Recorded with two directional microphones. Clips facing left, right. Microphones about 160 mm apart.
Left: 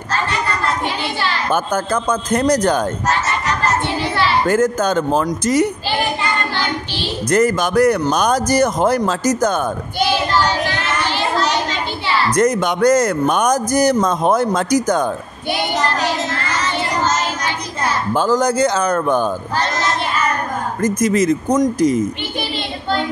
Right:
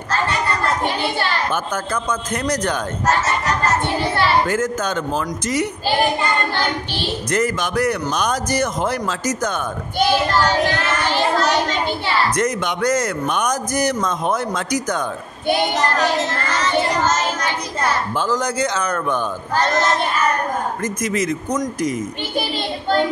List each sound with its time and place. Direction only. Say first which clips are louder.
1.5 s a man's voice: left 5 dB; 40° left (ahead or behind)
4.5 s a man's voice: left 5 dB; 40° left (ahead or behind)
7.2 s a man's voice: left 7 dB; 40° left (ahead or behind)
12.4 s a man's voice: left 5 dB; 40° left (ahead or behind)
18.1 s a man's voice: left 5 dB; 40° left (ahead or behind)
20.8 s a man's voice: left 11 dB; 35° left (ahead or behind)